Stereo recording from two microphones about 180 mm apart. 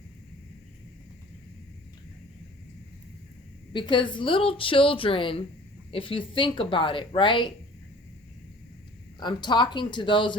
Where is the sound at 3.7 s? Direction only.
25° left (ahead or behind).